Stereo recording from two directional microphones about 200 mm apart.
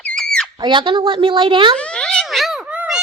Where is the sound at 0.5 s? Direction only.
25° right (ahead or behind).